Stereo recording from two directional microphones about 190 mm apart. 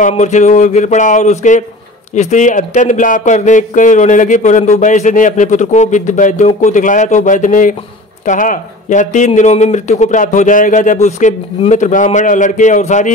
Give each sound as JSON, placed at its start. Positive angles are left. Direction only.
{"t": 0.1, "sound": "speech", "side_deg": 35}